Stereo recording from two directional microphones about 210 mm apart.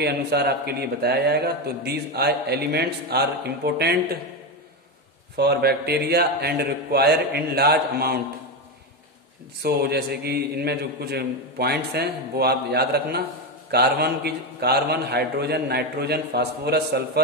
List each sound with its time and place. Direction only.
0.0 s speech: 50° right (ahead or behind)
5.3 s speech: 50° right (ahead or behind)
9.6 s speech: 50° right (ahead or behind)